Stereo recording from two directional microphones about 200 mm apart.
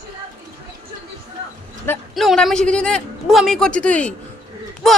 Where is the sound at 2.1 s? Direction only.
Centre (ahead or behind).